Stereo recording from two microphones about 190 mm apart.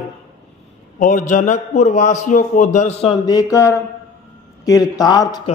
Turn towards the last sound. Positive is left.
turn(degrees=20)  # may be behind; listen again after turning